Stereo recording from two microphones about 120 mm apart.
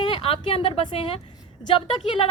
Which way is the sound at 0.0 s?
50° left (ahead or behind).